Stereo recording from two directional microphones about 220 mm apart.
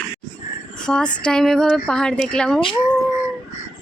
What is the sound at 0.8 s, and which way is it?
Speech, 5° left (ahead or behind).